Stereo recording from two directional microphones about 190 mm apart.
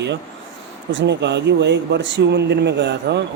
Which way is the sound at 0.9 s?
65° right (ahead or behind).